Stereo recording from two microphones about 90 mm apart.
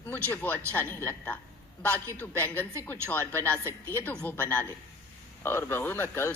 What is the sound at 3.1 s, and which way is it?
A man's voice, 20° left (ahead or behind).